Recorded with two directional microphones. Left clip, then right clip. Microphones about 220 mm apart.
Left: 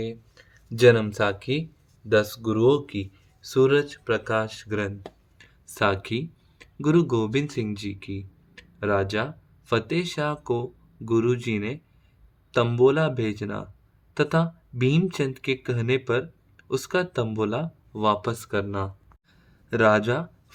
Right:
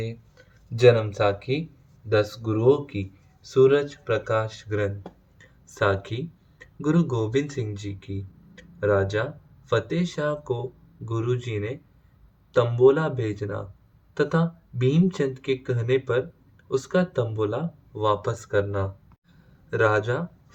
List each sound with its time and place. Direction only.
0.8 s speech: 45° left (ahead or behind)